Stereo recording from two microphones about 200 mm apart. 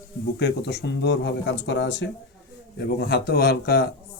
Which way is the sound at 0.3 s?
55° left (ahead or behind).